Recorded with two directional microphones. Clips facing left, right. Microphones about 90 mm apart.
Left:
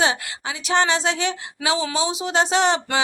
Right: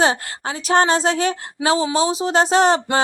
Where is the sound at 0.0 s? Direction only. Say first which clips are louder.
Right 3 dB; 40° right (ahead or behind).